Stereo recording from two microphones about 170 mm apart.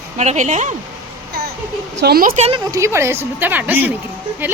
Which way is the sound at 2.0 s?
65° right (ahead or behind).